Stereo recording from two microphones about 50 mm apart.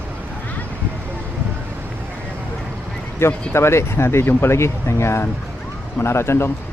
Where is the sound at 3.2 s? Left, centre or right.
Left.